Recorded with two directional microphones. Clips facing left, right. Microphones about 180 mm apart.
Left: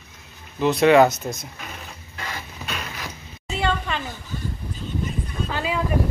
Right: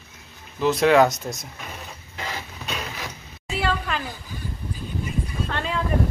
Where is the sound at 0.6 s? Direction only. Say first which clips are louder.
Left 2 dB; centre (ahead or behind).